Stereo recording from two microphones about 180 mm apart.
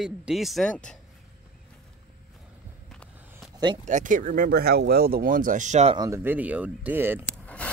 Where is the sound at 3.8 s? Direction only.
45° right (ahead or behind).